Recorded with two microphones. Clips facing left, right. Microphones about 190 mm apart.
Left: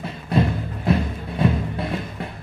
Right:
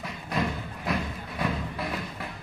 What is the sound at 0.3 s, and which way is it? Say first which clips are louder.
Music: left 8 dB; 30° left (ahead or behind).